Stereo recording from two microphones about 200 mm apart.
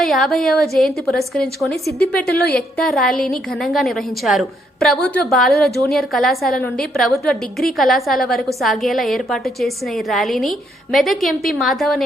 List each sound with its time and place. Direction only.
0.0 s a woman's voice: centre (ahead or behind)
2.3 s a woman's voice: 50° left (ahead or behind)
2.7 s a woman's voice: centre (ahead or behind)